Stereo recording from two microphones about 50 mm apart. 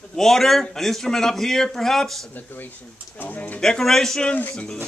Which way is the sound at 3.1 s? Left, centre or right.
Left.